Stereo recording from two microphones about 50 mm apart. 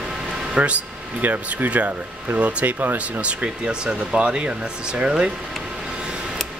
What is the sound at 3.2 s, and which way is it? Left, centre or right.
Speech, right.